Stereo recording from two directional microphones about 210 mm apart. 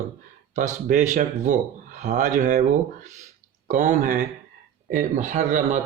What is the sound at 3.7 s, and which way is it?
Speech, 35° right (ahead or behind).